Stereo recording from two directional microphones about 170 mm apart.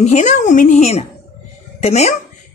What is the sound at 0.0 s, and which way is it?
Speech, 45° left (ahead or behind).